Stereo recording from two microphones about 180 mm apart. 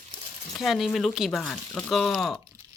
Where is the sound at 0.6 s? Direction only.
Centre (ahead or behind).